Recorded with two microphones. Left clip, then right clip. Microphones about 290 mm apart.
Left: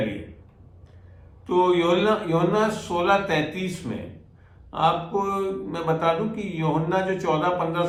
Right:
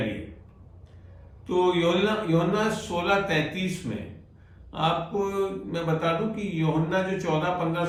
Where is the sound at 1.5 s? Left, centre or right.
Centre.